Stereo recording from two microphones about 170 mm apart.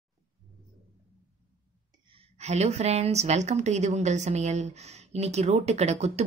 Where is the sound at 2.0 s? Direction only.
35° right (ahead or behind).